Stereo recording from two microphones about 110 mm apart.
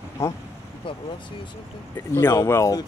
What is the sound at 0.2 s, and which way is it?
Speech, 25° left (ahead or behind).